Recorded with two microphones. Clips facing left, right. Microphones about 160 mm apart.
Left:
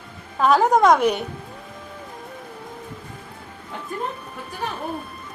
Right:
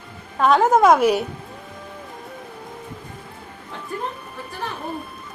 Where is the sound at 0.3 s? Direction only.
Centre (ahead or behind).